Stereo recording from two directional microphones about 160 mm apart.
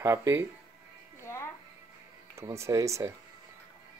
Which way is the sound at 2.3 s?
15° right (ahead or behind).